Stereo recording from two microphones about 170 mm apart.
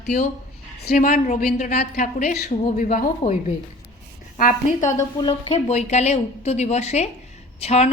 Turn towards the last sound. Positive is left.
turn(degrees=40)  # may be behind; listen again after turning